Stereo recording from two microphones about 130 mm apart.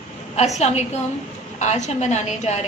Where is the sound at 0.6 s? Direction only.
55° left (ahead or behind).